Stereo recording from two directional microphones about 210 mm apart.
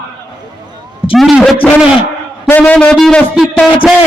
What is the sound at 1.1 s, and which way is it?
A man's voice, centre (ahead or behind).